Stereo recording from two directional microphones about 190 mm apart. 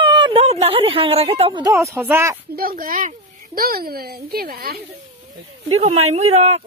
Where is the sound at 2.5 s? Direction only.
50° right (ahead or behind).